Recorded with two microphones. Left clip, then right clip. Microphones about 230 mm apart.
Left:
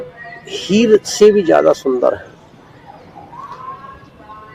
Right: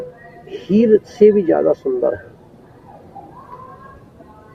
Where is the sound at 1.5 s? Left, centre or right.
Left.